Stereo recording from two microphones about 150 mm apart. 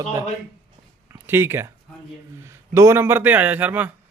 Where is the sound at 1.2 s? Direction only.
15° right (ahead or behind).